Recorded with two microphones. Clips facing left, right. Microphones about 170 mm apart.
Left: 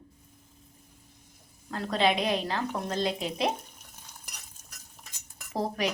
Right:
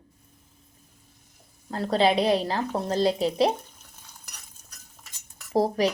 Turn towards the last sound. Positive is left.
turn(degrees=-35)  # may be behind; listen again after turning